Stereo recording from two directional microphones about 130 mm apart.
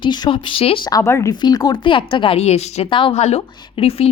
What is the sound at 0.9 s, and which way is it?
Speech, 25° left (ahead or behind).